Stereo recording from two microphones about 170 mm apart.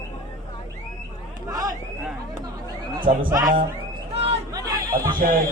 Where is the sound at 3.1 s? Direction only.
45° right (ahead or behind).